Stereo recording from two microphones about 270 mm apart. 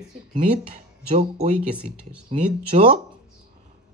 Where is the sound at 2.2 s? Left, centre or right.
Right.